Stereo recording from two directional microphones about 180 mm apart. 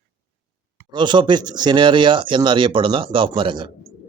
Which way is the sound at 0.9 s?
25° right (ahead or behind).